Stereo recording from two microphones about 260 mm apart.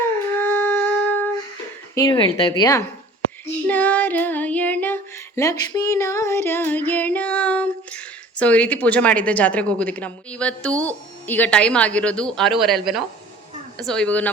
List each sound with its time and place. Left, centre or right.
0.3 s a sound: centre
2.0 s speech: centre
3.7 s music: centre